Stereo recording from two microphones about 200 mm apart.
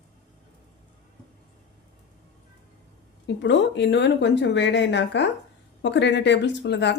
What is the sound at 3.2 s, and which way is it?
Speech, 60° left (ahead or behind).